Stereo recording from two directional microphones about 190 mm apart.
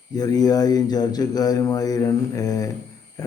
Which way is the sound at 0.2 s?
20° left (ahead or behind).